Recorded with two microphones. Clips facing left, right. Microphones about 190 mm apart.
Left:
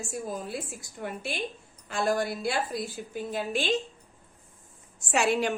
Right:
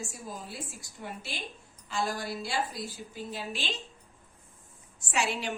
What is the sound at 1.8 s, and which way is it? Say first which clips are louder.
A woman's voice: left 6 dB; 55° left (ahead or behind).